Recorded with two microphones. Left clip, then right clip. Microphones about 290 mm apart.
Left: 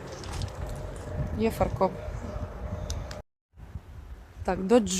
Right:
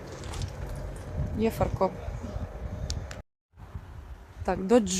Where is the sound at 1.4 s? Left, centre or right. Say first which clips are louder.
Left 1 dB; centre.